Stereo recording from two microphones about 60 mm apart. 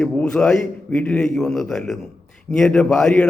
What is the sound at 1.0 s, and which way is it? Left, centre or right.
Speech, left.